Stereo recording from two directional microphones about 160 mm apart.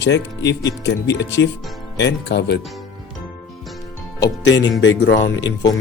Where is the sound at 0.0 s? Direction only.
90° left.